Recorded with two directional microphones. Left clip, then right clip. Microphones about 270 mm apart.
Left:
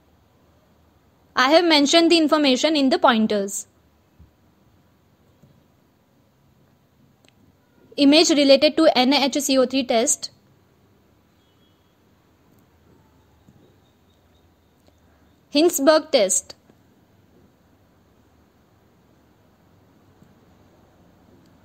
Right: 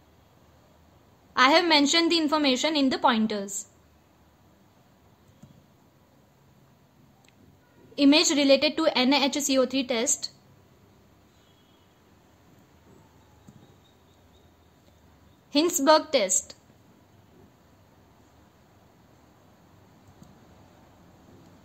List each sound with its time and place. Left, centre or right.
1.3 s a woman's voice: left
7.9 s a woman's voice: left
15.5 s a woman's voice: centre